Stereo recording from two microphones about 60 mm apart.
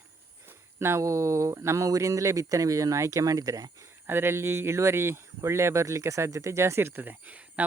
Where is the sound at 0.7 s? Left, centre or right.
Right.